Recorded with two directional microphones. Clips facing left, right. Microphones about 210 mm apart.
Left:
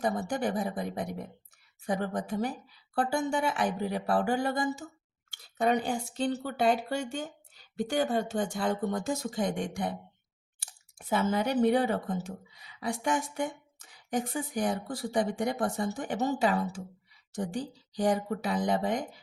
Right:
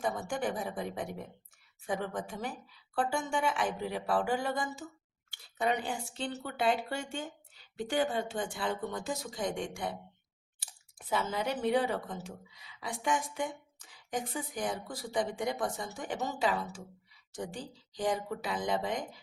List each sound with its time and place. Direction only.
0.0 s speech: 40° left (ahead or behind)
10.9 s speech: 45° left (ahead or behind)